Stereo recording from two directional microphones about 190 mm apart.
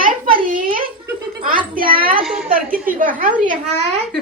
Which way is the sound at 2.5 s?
50° right (ahead or behind).